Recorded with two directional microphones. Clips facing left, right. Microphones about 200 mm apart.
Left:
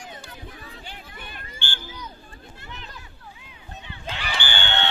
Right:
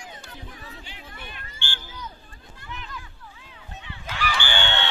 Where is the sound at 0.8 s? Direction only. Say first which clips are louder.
Left 1 dB; 50° left (ahead or behind).